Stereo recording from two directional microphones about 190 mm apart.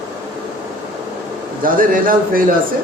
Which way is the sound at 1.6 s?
45° right (ahead or behind).